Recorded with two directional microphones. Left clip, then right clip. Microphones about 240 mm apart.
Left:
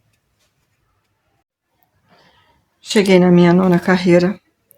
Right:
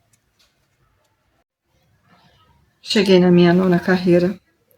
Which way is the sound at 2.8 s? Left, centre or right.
Centre.